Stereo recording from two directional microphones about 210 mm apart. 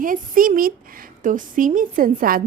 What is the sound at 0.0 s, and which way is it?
A woman's voice, 40° right (ahead or behind).